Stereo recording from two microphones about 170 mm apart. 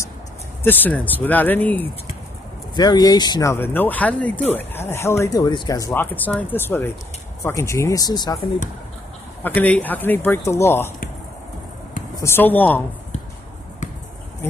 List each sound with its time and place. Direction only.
0.7 s speech: 10° left (ahead or behind)
2.7 s speech: 25° left (ahead or behind)
9.4 s speech: 10° left (ahead or behind)
12.2 s speech: 15° left (ahead or behind)